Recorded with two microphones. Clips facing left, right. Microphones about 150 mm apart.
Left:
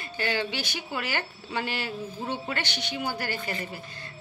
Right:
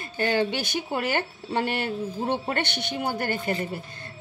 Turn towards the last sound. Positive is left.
turn(degrees=-50)  # may be behind; listen again after turning